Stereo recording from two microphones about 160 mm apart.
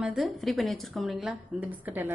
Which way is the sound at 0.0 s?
Centre (ahead or behind).